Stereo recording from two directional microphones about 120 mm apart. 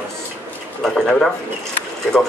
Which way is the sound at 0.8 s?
5° left (ahead or behind).